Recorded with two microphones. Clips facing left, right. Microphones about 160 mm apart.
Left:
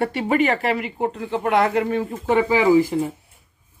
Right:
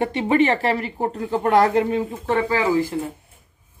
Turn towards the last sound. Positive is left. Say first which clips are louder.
# left 4 dB
turn(degrees=10)  # may be behind; listen again after turning